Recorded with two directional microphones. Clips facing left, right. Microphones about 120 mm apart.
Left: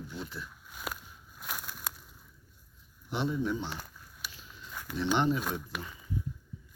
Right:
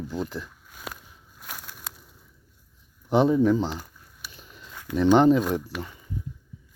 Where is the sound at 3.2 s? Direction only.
90° right.